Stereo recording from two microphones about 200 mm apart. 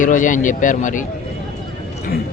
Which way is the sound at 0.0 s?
40° left (ahead or behind).